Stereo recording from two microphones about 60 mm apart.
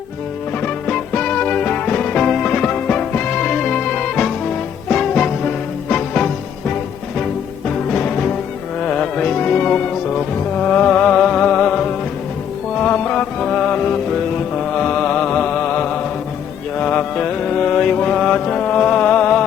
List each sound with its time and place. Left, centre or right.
0.6 s music: centre
7.9 s music: centre
14.5 s mantra: centre